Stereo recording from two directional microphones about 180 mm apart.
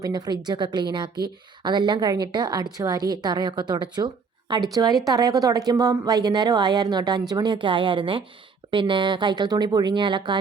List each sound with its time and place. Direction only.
0.0 s speech: 25° right (ahead or behind)